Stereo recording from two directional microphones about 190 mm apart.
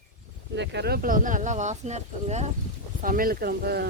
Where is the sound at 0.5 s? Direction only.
65° right (ahead or behind); by 2.5 s 35° right (ahead or behind).